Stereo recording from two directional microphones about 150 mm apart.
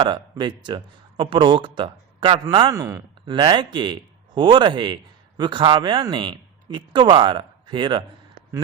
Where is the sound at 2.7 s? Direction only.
25° right (ahead or behind).